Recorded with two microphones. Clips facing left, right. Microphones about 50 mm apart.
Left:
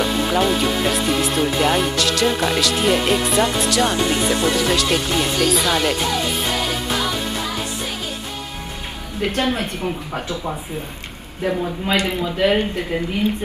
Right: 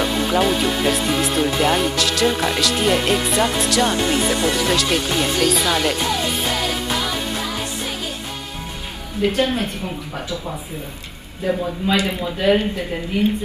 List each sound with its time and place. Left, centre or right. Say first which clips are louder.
0.0 s speech: even; centre
9.2 s speech: right 2 dB; left
11.4 s speech: right 1 dB; left